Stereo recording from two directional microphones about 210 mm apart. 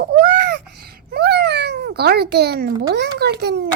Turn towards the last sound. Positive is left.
turn(degrees=-55)  # may be behind; listen again after turning